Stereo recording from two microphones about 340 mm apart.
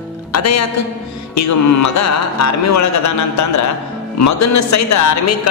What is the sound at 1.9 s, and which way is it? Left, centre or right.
A man's voice, left.